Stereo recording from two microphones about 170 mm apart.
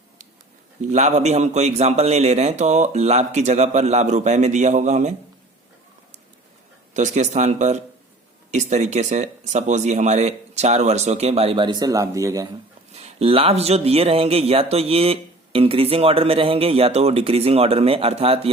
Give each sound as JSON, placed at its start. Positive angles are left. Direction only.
{"t": 0.8, "sound": "a man's voice", "side_deg": -45}
{"t": 6.9, "sound": "a man's voice", "side_deg": -45}
{"t": 12.9, "sound": "speech", "side_deg": -40}